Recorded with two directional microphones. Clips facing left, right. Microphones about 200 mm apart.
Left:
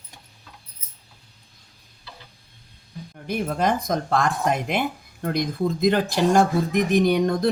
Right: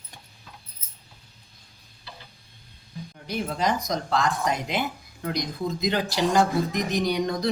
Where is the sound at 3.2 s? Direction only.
50° left (ahead or behind).